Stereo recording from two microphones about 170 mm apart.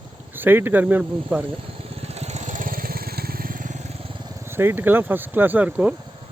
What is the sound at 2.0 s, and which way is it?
Vehicle, 40° right (ahead or behind).